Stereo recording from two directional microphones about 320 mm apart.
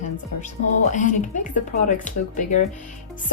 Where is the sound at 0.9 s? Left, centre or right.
Left.